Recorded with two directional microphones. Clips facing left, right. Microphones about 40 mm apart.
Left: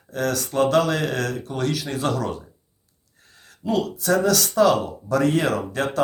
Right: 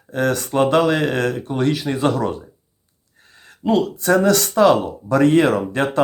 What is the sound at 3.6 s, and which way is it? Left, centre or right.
Speech, right.